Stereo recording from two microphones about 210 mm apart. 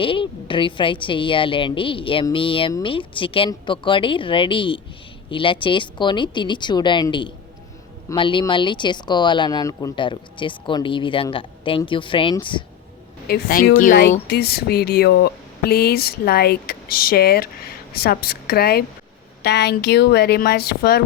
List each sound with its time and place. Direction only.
0.0 s a woman's voice: 25° left (ahead or behind)
13.2 s speech: 45° left (ahead or behind)